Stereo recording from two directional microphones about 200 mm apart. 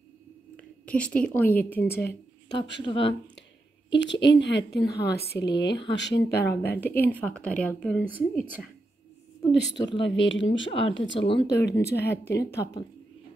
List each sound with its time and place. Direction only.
0.6 s a woman's voice: 5° left (ahead or behind)
2.0 s a sound: 55° left (ahead or behind)
2.8 s speech: 25° left (ahead or behind)
3.9 s speech: 65° left (ahead or behind)
6.7 s speech: 10° left (ahead or behind)
8.1 s speech: 10° right (ahead or behind)
9.5 s speech: 60° left (ahead or behind)
10.7 s speech: 25° left (ahead or behind)
11.4 s speech: 60° left (ahead or behind)